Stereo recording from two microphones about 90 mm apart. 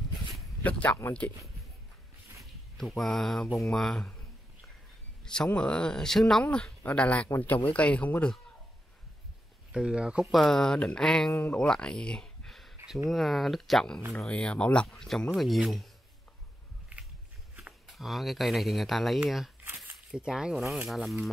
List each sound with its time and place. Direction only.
0.6 s speech: 15° left (ahead or behind)
2.8 s speech: 5° left (ahead or behind)
5.2 s a sound: 5° left (ahead or behind)
5.5 s speech: 10° left (ahead or behind)
9.7 s speech: 10° right (ahead or behind)
10.3 s speech: centre (ahead or behind)
17.8 s speech: centre (ahead or behind)